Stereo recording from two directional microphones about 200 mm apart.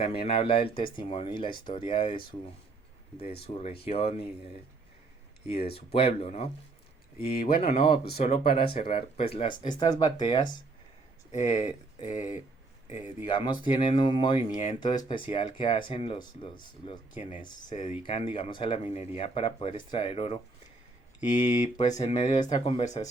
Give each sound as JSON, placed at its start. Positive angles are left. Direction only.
{"t": 0.1, "sound": "speech", "side_deg": 30}
{"t": 3.4, "sound": "speech", "side_deg": 30}
{"t": 3.8, "sound": "mantra", "side_deg": 30}
{"t": 5.5, "sound": "speech", "side_deg": 30}
{"t": 7.6, "sound": "speech", "side_deg": 30}
{"t": 11.3, "sound": "mantra", "side_deg": 35}
{"t": 13.2, "sound": "speech", "side_deg": 25}
{"t": 14.5, "sound": "mantra", "side_deg": 35}
{"t": 14.8, "sound": "speech", "side_deg": 20}
{"t": 21.2, "sound": "mantra", "side_deg": 35}